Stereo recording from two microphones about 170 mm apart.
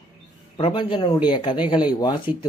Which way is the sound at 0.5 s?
30° left (ahead or behind).